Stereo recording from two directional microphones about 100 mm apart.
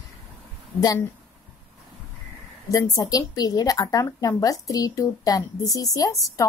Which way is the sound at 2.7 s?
35° left (ahead or behind).